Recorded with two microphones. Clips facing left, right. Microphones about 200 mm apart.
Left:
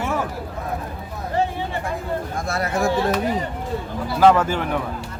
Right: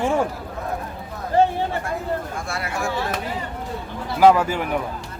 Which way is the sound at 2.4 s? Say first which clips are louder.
Left 5 dB; 40° left (ahead or behind).